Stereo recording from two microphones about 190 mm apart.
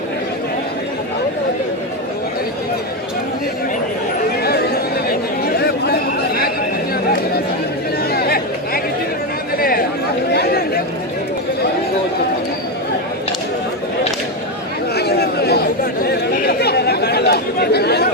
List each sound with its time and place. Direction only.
4.4 s chatter: 55° left (ahead or behind)
8.1 s chatter: 55° left (ahead or behind)
9.6 s a sound: 50° left (ahead or behind)
10.3 s chatter: 55° left (ahead or behind)
14.9 s chatter: 55° left (ahead or behind)